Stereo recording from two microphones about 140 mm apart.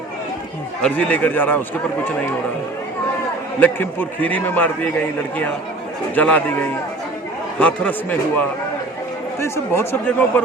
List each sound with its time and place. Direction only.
0.8 s a man's voice: 10° left (ahead or behind)
3.6 s a man's voice: 15° left (ahead or behind)
6.1 s a man's voice: 10° left (ahead or behind)